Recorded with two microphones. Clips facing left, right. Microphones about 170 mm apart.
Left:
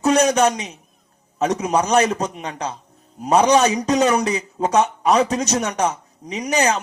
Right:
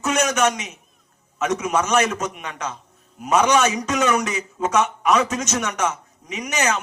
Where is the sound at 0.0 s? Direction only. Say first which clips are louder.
Left 4 dB; 35° left (ahead or behind).